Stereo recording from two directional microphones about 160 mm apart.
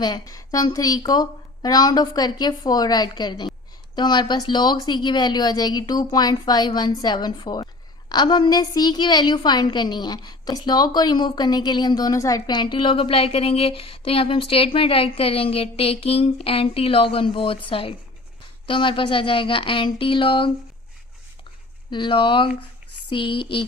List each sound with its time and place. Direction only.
0.0 s a woman's voice: 25° left (ahead or behind)
21.8 s a woman's voice: 30° left (ahead or behind)